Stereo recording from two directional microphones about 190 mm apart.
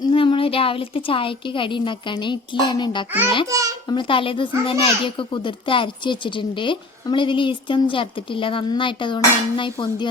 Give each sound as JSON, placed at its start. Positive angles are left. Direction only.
{"t": 0.1, "sound": "a child's voice", "side_deg": 25}
{"t": 3.4, "sound": "a child's voice", "side_deg": -20}
{"t": 3.8, "sound": "a child's voice", "side_deg": 25}